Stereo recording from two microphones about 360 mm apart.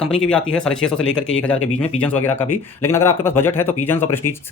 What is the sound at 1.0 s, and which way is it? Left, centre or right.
Speech, left.